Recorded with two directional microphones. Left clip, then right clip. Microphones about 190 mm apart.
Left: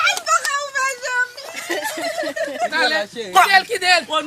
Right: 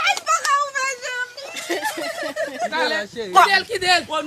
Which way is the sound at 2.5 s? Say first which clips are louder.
Left 4 dB; 10° right (ahead or behind).